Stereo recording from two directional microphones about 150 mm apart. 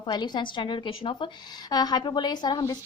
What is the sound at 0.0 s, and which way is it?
A woman's voice, 30° left (ahead or behind).